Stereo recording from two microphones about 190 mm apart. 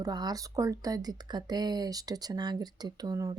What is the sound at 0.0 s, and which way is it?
Speech, 20° right (ahead or behind).